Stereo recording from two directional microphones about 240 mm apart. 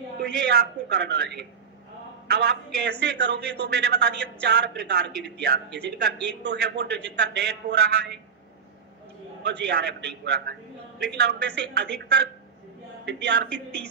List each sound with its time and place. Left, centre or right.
0.4 s a man's voice: right
9.4 s a man's voice: right
13.0 s a man's voice: right